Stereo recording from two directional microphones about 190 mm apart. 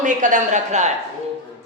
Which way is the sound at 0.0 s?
40° right (ahead or behind).